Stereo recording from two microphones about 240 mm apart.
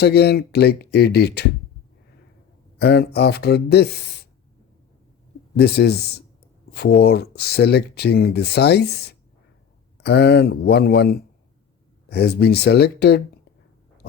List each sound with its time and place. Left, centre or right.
0.0 s speech: left
2.7 s speech: left
5.5 s speech: left